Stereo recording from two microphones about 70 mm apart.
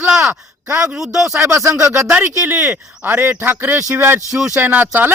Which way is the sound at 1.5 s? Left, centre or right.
Right.